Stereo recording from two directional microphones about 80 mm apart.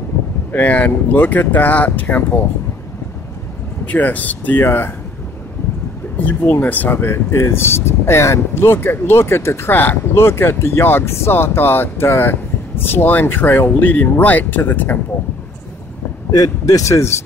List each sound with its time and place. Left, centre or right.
0.5 s speech: left
3.8 s speech: left
6.2 s speech: left
16.3 s speech: left